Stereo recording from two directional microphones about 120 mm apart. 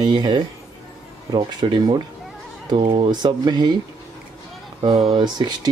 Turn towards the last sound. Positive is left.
turn(degrees=-35)  # may be behind; listen again after turning